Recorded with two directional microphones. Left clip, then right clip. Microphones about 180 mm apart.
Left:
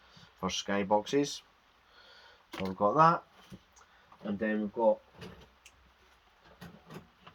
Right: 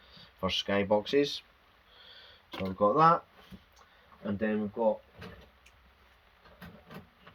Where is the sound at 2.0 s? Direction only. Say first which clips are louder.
Right 3 dB; 50° left (ahead or behind).